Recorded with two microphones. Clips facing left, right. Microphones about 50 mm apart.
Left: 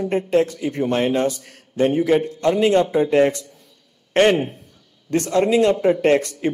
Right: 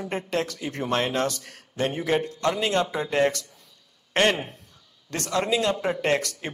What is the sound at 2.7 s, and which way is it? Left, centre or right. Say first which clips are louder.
Speech: left 8 dB; left.